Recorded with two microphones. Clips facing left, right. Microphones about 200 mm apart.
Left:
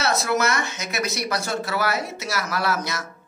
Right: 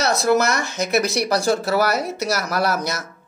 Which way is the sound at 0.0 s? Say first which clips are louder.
Right 5 dB; 40° right (ahead or behind).